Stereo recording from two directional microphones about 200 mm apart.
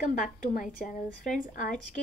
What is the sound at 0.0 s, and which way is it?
A woman's voice, 45° left (ahead or behind).